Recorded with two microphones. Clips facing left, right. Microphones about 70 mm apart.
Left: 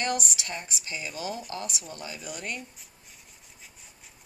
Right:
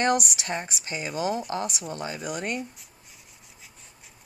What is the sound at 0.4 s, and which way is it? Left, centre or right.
Speech, right.